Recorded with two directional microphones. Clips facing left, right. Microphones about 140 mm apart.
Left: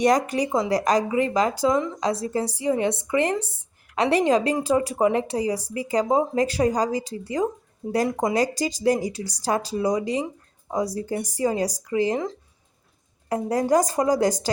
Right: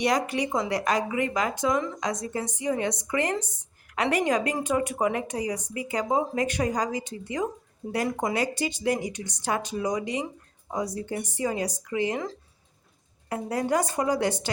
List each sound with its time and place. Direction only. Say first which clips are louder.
0.0 s a woman's voice: left 5 dB; 45° left (ahead or behind)
13.2 s a woman's voice: left 5 dB; 40° left (ahead or behind)